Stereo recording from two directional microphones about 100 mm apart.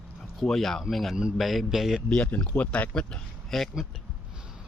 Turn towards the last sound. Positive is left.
turn(degrees=0)  # may be behind; listen again after turning